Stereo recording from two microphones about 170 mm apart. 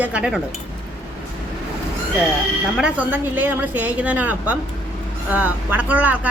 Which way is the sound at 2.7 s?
5° right (ahead or behind).